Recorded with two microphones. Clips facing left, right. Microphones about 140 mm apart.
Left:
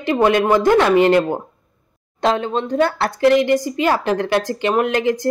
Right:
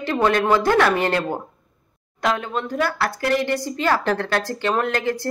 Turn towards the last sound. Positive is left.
turn(degrees=15)  # may be behind; listen again after turning